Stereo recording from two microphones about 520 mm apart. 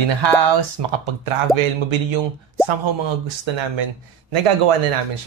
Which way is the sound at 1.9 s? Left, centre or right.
Right.